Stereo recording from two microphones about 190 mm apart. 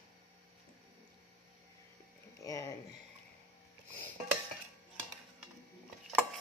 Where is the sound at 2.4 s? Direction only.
15° left (ahead or behind).